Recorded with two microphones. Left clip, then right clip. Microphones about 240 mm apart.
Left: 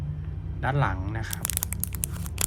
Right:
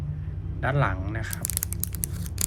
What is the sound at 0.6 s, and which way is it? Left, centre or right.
Speech, centre.